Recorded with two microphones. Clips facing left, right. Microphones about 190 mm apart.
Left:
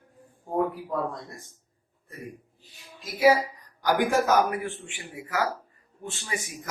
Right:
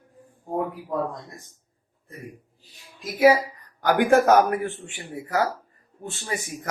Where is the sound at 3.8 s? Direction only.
55° right (ahead or behind); by 6.3 s 40° right (ahead or behind).